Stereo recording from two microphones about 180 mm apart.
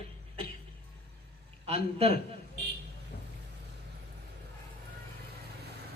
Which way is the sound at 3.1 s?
55° left (ahead or behind).